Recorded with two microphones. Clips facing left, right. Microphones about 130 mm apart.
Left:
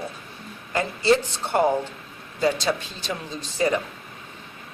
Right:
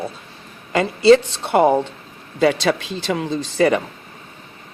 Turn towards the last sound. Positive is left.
turn(degrees=-90)